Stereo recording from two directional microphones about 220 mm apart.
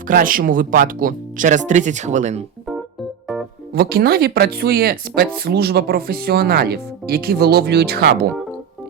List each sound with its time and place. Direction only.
0.1 s speech: 40° right (ahead or behind)
3.8 s speech: 45° right (ahead or behind)